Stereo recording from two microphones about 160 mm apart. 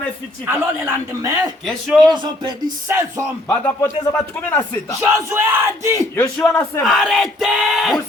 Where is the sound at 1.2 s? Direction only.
20° right (ahead or behind).